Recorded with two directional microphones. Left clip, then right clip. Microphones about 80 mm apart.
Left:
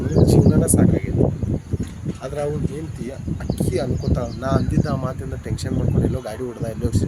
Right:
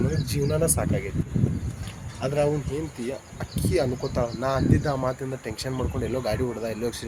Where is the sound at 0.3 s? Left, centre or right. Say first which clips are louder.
Left 4 dB; left.